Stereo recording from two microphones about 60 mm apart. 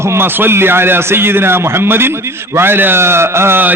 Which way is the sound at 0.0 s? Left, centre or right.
Right.